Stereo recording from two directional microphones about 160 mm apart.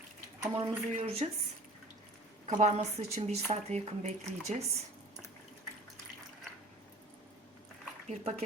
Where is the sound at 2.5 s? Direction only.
50° right (ahead or behind).